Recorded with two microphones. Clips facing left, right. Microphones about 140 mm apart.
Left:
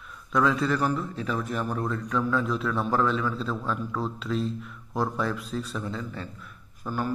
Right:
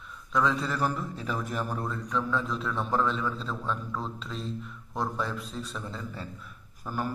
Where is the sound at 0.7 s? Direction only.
5° right (ahead or behind).